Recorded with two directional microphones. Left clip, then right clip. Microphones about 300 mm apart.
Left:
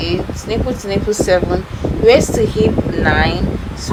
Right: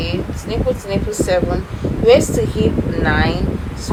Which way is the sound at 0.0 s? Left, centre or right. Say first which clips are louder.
Left 3 dB; left.